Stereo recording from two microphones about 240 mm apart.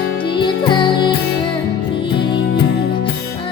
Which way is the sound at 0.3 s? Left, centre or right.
Centre.